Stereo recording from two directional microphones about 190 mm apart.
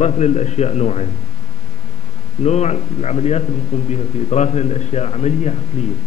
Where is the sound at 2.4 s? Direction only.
35° left (ahead or behind).